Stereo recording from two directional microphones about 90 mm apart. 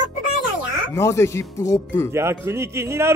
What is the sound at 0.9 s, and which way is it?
Speech, 30° left (ahead or behind).